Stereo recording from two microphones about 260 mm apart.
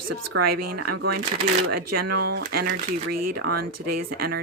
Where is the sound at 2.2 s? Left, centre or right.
Right.